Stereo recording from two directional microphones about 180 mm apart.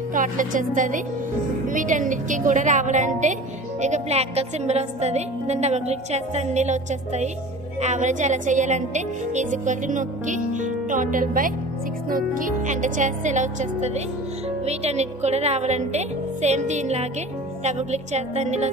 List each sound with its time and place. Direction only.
0.1 s a woman's voice: 45° right (ahead or behind)